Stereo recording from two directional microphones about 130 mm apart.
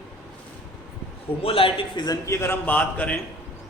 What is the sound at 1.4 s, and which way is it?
Speech, 45° left (ahead or behind).